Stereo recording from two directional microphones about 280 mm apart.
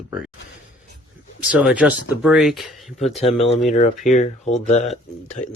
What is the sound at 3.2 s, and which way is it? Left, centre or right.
Speech, left.